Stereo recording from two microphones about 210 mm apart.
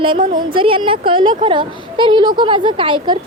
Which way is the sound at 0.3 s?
25° right (ahead or behind).